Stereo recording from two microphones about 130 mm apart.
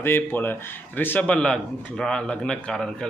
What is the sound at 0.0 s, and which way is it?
Speech, 15° left (ahead or behind).